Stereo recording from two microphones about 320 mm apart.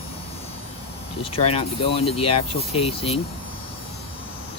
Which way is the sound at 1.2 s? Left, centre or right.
Centre.